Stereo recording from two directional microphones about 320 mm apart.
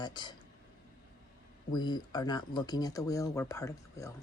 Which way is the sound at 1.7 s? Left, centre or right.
Centre.